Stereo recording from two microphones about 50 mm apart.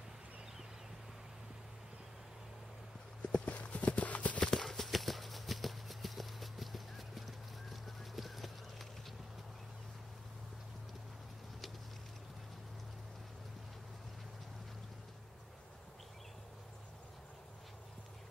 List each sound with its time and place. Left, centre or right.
3.2 s clip-clop: left
4.5 s clip-clop: centre